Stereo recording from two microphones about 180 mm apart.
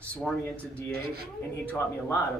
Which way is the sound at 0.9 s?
60° right (ahead or behind).